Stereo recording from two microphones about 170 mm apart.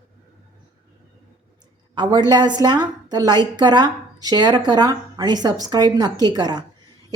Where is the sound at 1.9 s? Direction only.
25° right (ahead or behind).